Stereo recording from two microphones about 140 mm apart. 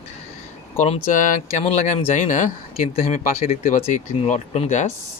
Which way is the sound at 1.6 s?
50° left (ahead or behind).